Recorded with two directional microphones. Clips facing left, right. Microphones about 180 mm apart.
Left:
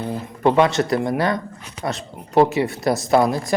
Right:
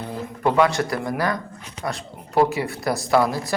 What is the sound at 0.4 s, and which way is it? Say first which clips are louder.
Speech: left 3 dB; 25° left (ahead or behind).